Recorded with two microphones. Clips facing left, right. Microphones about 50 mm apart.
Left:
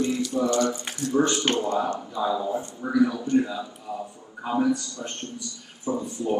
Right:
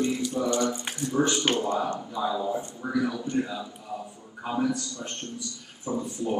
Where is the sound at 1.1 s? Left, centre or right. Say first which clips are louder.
Left 2 dB; centre.